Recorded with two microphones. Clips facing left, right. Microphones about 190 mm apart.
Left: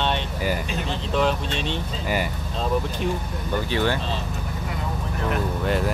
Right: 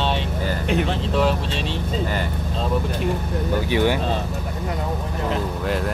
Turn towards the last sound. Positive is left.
turn(degrees=0)  # may be behind; listen again after turning